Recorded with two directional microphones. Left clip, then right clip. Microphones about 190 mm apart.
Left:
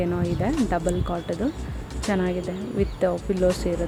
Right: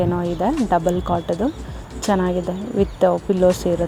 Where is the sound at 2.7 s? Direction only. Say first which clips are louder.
Right 7 dB; 15° right (ahead or behind).